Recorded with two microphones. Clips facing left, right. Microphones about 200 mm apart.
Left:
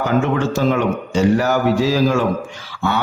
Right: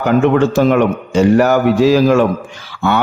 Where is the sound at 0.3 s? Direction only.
60° right (ahead or behind).